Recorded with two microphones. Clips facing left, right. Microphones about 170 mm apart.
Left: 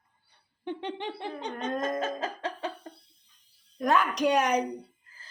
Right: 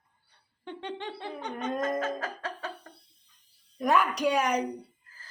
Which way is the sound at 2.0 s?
20° left (ahead or behind).